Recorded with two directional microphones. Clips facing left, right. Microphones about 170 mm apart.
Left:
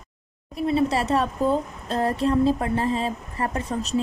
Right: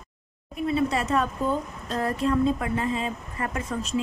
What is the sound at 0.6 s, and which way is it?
A woman's voice, 30° left (ahead or behind).